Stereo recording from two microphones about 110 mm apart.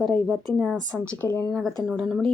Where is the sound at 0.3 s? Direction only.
Centre (ahead or behind).